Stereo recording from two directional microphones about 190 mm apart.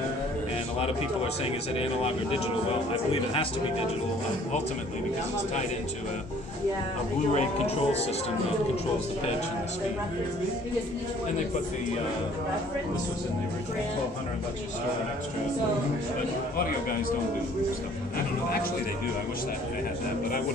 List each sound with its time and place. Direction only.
1.4 s speech: 30° left (ahead or behind)
7.3 s speech: 35° left (ahead or behind)